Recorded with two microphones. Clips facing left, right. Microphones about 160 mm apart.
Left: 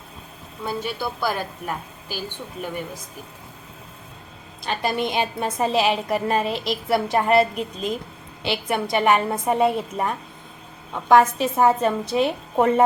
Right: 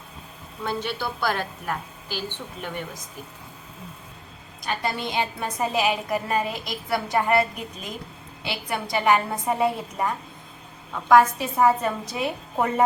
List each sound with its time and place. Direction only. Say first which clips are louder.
0.6 s a woman's voice: left 1 dB; 10° left (ahead or behind)
4.6 s a woman's voice: left 4 dB; 25° left (ahead or behind)
6.4 s a woman's voice: left 5 dB; 80° left
6.9 s a woman's voice: left 3 dB; 25° left (ahead or behind)
7.5 s a woman's voice: left 9 dB; 90° left
8.4 s a woman's voice: left 6 dB; 20° left (ahead or behind)